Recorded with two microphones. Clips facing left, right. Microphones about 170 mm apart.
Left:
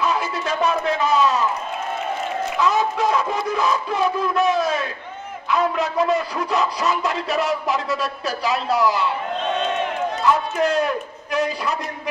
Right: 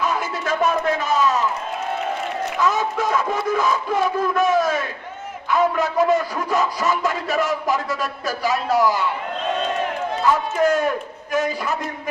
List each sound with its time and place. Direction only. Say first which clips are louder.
0.0 s a man's voice: left 1 dB; 50° right (ahead or behind)
2.6 s a man's voice: left 1 dB; 50° right (ahead or behind)
10.6 s a man's voice: right 1 dB; 45° right (ahead or behind)